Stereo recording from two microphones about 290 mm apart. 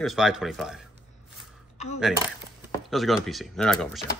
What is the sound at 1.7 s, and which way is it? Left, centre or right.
Coin, left.